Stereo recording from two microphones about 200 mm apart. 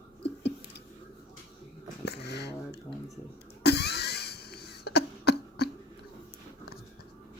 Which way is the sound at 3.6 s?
55° left (ahead or behind).